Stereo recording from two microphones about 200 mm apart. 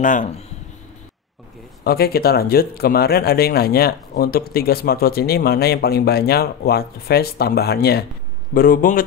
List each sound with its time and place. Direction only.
0.0 s speech: 40° left (ahead or behind)
1.9 s speech: 50° left (ahead or behind)